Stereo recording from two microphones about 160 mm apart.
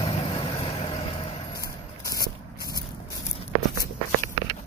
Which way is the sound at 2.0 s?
25° left (ahead or behind).